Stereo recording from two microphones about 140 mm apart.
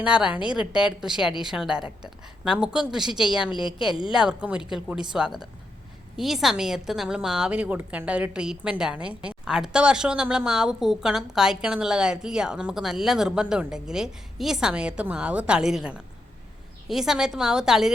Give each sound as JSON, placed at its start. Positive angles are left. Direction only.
{"t": 0.0, "sound": "a woman's voice", "side_deg": -5}
{"t": 3.5, "sound": "a woman's voice", "side_deg": 35}
{"t": 3.8, "sound": "a woman's voice", "side_deg": -5}